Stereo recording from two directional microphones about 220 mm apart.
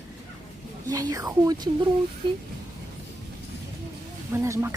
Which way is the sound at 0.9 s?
15° right (ahead or behind).